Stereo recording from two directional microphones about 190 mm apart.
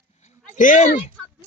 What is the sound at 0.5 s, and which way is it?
Speech, 45° left (ahead or behind).